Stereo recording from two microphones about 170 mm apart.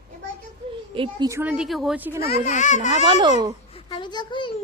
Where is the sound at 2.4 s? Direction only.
45° left (ahead or behind).